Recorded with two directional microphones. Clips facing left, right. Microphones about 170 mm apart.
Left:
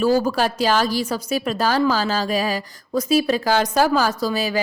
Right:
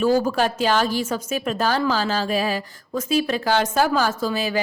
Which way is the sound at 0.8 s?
35° left (ahead or behind).